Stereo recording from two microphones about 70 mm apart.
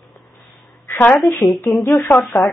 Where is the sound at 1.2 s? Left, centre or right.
Centre.